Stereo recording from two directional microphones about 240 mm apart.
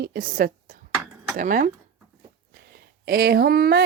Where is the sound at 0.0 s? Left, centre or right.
Right.